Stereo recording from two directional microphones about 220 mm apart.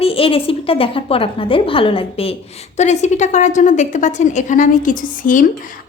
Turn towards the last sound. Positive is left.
turn(degrees=35)  # may be behind; listen again after turning